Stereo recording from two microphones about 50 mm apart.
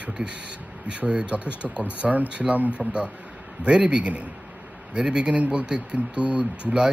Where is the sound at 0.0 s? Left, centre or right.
Right.